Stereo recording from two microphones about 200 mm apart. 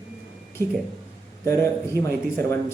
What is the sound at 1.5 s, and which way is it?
A man's voice, 15° left (ahead or behind).